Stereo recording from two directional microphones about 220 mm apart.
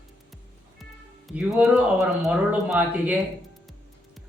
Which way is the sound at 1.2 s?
5° right (ahead or behind).